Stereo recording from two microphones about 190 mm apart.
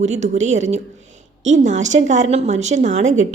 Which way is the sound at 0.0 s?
35° right (ahead or behind).